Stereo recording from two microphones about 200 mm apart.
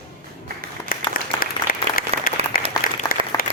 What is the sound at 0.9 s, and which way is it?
Applause, 45° left (ahead or behind).